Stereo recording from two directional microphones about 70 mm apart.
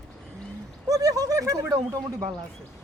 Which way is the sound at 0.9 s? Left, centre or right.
Right.